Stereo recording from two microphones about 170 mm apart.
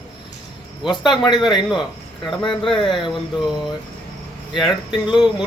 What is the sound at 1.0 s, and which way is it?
Speech, 25° left (ahead or behind).